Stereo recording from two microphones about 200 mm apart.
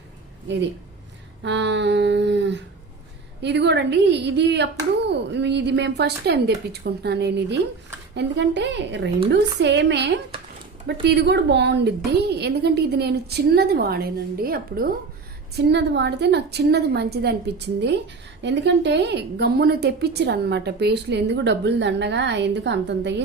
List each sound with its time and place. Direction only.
1.4 s a woman's voice: 65° right (ahead or behind); by 14.8 s 45° right (ahead or behind)
15.5 s a woman's voice: 60° right (ahead or behind)